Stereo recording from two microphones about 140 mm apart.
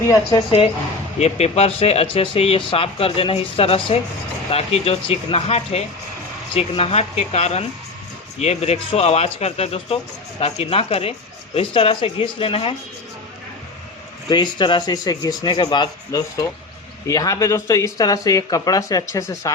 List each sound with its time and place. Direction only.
1.2 s speech: 50° left (ahead or behind)
14.3 s speech: 30° left (ahead or behind)